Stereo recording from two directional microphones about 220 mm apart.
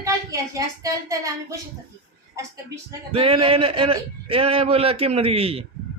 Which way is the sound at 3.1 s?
25° right (ahead or behind).